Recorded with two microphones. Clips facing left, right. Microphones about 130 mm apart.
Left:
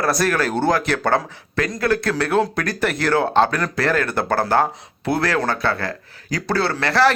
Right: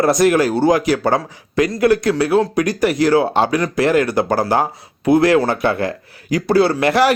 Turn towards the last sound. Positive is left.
turn(degrees=-15)  # may be behind; listen again after turning